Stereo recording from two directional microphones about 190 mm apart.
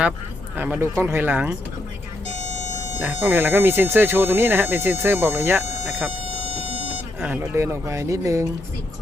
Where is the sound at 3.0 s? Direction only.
10° right (ahead or behind).